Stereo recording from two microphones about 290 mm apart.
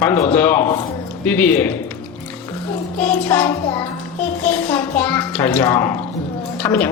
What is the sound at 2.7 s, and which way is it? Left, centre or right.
Child singing, centre.